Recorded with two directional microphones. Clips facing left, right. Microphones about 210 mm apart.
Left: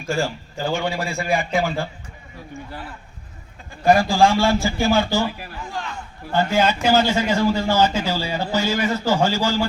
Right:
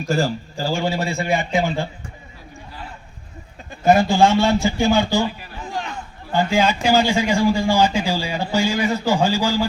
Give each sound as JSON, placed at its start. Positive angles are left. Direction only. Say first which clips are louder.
{"t": 0.0, "sound": "a man's voice", "louder": "right 3 dB", "side_deg": -40}
{"t": 0.6, "sound": "a man's voice", "louder": "right 1 dB", "side_deg": -25}
{"t": 1.3, "sound": "a man's voice", "louder": "left 1 dB", "side_deg": 0}
{"t": 1.5, "sound": "a man's voice", "louder": "right 1 dB", "side_deg": -20}
{"t": 3.8, "sound": "a man's voice", "louder": "right 1 dB", "side_deg": -20}
{"t": 6.3, "sound": "a man's voice", "louder": "right 1 dB", "side_deg": -10}